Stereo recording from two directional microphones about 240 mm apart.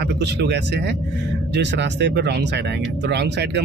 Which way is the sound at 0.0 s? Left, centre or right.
Right.